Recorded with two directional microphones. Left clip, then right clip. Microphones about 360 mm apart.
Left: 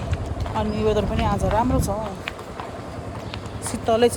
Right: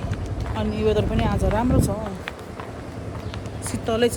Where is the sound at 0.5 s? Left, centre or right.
Centre.